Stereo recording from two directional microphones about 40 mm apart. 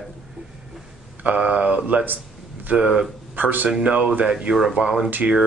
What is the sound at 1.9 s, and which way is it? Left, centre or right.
Speech, right.